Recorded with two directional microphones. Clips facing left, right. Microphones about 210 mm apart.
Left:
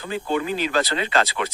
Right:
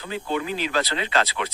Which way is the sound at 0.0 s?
45° left (ahead or behind).